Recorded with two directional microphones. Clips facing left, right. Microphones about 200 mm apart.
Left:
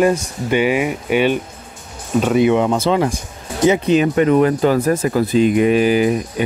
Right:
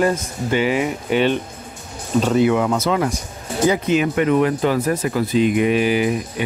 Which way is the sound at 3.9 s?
35° left (ahead or behind).